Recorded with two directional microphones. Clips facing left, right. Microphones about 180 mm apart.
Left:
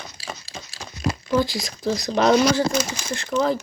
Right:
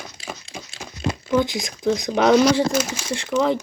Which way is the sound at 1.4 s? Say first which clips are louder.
Right 1 dB; 20° right (ahead or behind).